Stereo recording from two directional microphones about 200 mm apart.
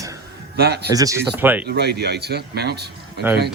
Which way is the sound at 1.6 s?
55° right (ahead or behind).